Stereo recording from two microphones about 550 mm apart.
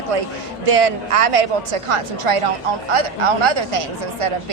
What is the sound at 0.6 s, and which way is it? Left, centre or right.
A woman's voice, right.